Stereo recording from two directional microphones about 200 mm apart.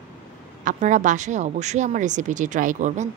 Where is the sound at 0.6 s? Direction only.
40° right (ahead or behind).